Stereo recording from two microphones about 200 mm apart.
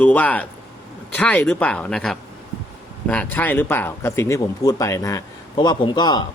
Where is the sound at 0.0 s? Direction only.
5° left (ahead or behind).